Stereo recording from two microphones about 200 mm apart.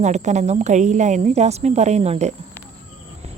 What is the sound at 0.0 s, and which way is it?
A woman's voice, 35° right (ahead or behind).